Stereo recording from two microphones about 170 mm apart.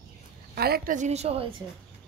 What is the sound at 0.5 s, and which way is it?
A woman's voice, 65° right (ahead or behind).